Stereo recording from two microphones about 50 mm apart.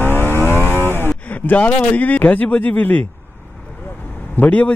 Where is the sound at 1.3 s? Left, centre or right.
Left.